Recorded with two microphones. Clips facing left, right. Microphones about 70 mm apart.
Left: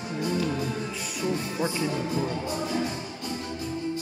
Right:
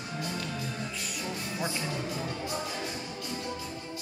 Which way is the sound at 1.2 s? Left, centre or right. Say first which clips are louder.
Left 8 dB; centre.